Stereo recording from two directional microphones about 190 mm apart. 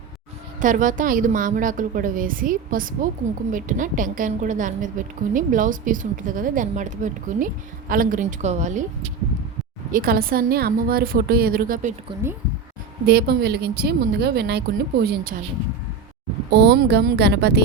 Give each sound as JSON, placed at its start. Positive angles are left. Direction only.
{"t": 0.6, "sound": "a woman's voice", "side_deg": -45}
{"t": 9.9, "sound": "a woman's voice", "side_deg": -50}
{"t": 13.1, "sound": "speech", "side_deg": -55}
{"t": 16.5, "sound": "speech", "side_deg": -60}